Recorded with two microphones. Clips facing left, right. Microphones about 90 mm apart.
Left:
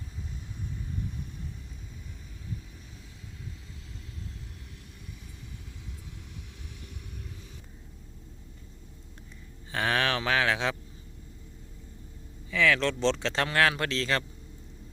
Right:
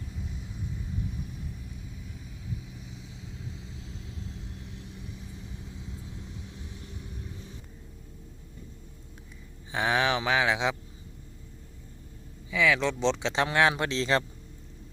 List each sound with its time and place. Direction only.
9.7 s speech: 15° right (ahead or behind)
12.5 s speech: 10° right (ahead or behind)